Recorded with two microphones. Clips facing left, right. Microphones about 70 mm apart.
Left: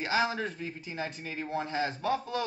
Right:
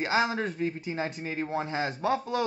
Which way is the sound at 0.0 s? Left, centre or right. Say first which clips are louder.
Right 3 dB; right.